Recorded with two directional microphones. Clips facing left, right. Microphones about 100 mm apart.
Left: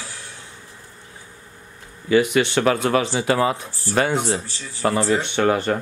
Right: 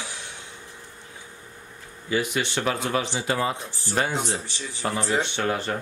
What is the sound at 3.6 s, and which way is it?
Speech, 20° right (ahead or behind).